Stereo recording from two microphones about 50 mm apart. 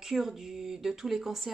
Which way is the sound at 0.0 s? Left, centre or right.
Centre.